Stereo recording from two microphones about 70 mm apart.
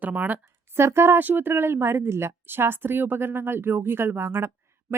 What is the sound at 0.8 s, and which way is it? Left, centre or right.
A woman's voice, right.